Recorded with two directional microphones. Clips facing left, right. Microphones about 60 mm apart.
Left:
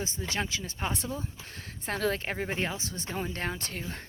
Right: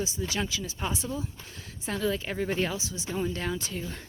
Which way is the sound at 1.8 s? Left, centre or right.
Left.